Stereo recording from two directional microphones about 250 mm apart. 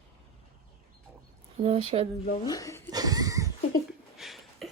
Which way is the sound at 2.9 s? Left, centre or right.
Centre.